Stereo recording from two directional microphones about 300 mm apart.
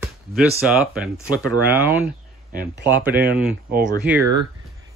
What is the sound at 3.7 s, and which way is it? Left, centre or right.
Speech, right.